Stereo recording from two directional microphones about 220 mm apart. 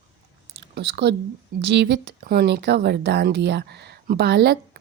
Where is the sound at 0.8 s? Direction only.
50° right (ahead or behind).